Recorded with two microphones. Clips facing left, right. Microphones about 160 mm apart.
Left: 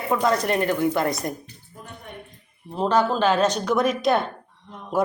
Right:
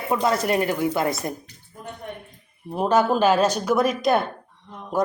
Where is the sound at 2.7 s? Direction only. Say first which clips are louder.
Right 1 dB; 10° right (ahead or behind).